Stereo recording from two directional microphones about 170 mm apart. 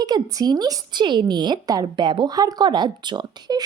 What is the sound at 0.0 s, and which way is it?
A woman's voice, 25° right (ahead or behind).